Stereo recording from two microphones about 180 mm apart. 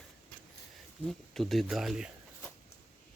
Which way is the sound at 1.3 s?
Centre (ahead or behind).